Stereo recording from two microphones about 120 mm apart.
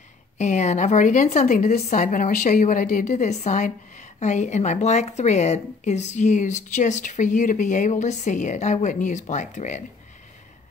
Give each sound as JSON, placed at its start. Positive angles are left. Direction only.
{"t": 0.4, "sound": "a woman's voice", "side_deg": 75}